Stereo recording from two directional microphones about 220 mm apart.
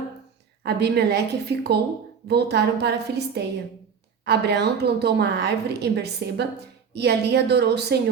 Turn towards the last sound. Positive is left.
turn(degrees=-50)  # may be behind; listen again after turning